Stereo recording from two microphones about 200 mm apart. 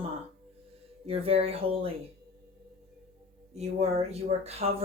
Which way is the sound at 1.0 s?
30° right (ahead or behind).